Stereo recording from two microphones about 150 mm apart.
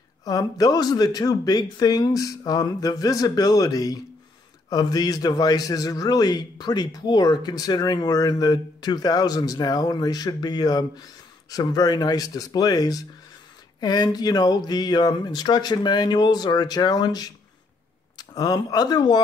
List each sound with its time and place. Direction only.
0.2 s a man's voice: 25° left (ahead or behind)